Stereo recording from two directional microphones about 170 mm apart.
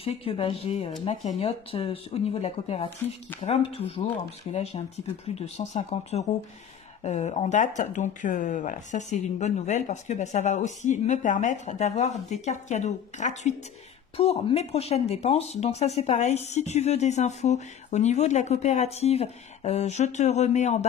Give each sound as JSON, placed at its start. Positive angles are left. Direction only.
{"t": 0.0, "sound": "speech", "side_deg": 35}